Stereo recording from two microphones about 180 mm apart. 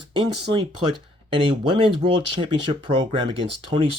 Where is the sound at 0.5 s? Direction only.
30° right (ahead or behind).